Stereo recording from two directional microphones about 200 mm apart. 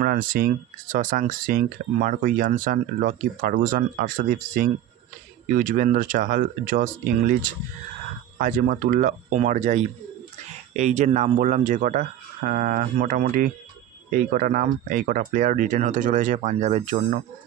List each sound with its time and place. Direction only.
0.0 s speech: 45° right (ahead or behind)